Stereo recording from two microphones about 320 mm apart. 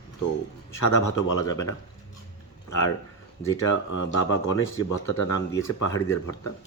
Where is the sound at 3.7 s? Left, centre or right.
Left.